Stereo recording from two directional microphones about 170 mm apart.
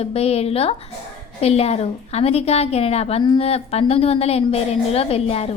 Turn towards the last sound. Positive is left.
turn(degrees=35)  # may be behind; listen again after turning